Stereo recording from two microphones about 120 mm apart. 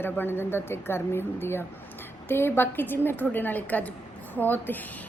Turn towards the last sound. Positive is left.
turn(degrees=15)  # may be behind; listen again after turning